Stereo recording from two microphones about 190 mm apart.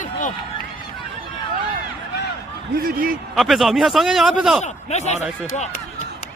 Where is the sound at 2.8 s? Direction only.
50° right (ahead or behind).